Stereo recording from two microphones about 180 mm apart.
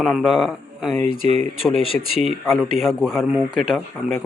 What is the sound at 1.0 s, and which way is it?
Speech, 40° right (ahead or behind).